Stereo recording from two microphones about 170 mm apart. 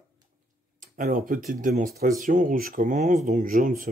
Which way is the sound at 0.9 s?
55° right (ahead or behind).